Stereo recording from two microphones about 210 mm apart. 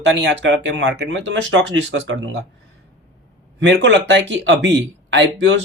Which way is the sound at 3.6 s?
60° right (ahead or behind).